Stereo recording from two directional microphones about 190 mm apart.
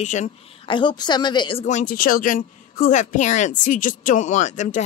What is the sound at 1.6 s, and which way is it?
Speech, 40° left (ahead or behind).